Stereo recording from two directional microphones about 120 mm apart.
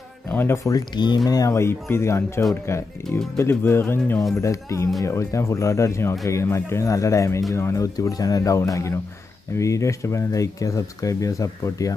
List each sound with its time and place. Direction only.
0.3 s music: 15° left (ahead or behind)
0.7 s speech: 35° left (ahead or behind)
3.0 s speech: 5° left (ahead or behind)
3.3 s speech: 20° left (ahead or behind)